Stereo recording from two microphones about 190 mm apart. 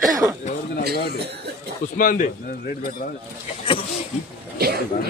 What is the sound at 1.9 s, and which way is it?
Speech, 45° left (ahead or behind).